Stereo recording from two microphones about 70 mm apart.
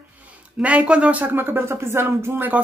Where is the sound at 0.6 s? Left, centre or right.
Centre; by 2.3 s right.